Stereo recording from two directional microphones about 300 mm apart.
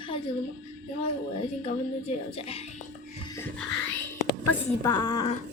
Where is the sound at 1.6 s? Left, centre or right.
Centre.